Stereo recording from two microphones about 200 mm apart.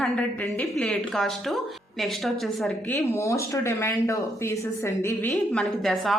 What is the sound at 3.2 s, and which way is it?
Speech, 15° left (ahead or behind).